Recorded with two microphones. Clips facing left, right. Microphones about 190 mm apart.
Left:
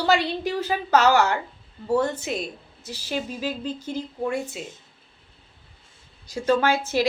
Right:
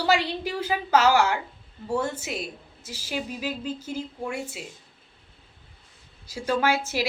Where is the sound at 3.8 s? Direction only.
35° left (ahead or behind).